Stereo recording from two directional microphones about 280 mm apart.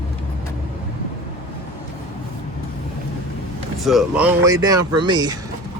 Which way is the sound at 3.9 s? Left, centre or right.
Centre.